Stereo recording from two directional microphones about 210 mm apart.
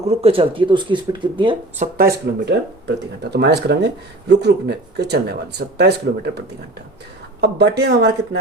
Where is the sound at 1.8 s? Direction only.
45° right (ahead or behind).